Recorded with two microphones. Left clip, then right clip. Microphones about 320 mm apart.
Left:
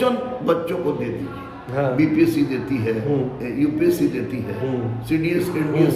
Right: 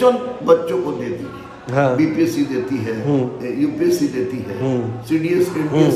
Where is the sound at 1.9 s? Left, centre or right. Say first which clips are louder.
Right 1 dB; centre.